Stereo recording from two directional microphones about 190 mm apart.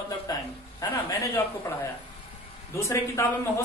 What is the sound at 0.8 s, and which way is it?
Speech, 20° left (ahead or behind).